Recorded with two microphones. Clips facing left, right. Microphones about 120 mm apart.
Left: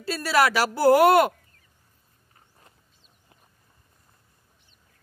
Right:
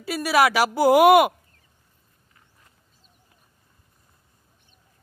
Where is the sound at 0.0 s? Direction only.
15° right (ahead or behind).